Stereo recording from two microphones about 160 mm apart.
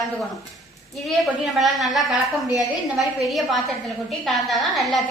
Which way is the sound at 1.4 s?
Centre (ahead or behind).